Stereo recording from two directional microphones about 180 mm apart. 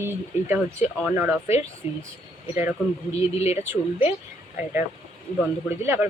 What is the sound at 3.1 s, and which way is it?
Speech, 35° left (ahead or behind).